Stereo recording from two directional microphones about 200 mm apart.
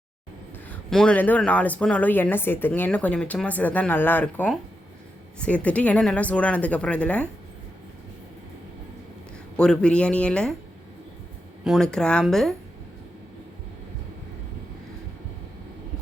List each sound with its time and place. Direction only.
0.7 s speech: 5° left (ahead or behind)
9.6 s speech: 5° left (ahead or behind)
11.6 s speech: centre (ahead or behind)